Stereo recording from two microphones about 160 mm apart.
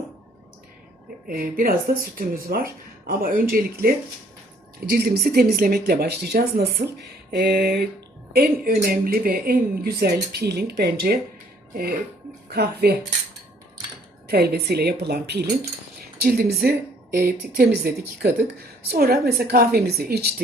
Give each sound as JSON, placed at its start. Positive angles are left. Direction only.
{"t": 1.3, "sound": "speech", "side_deg": -65}
{"t": 8.3, "sound": "speech", "side_deg": -75}
{"t": 14.3, "sound": "speech", "side_deg": -80}
{"t": 17.2, "sound": "speech", "side_deg": -65}
{"t": 18.2, "sound": "speech", "side_deg": -85}
{"t": 18.9, "sound": "speech", "side_deg": -75}